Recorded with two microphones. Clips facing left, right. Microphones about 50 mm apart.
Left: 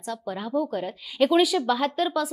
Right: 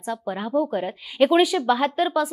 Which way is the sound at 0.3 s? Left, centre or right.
Centre.